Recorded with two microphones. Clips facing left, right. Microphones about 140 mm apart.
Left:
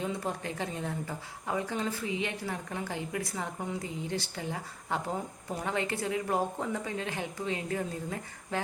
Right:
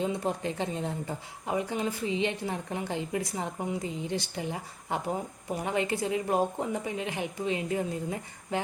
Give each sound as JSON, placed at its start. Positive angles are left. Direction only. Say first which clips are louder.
{"t": 0.0, "sound": "a woman's voice", "louder": "right 4 dB", "side_deg": -20}